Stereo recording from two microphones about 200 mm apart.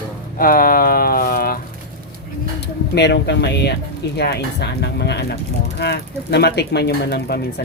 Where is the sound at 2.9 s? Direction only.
55° left (ahead or behind).